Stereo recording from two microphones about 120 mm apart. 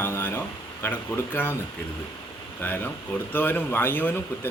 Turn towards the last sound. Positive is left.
turn(degrees=15)  # may be behind; listen again after turning